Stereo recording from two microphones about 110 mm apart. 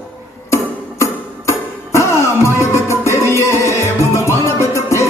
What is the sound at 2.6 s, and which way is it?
Music, 25° left (ahead or behind).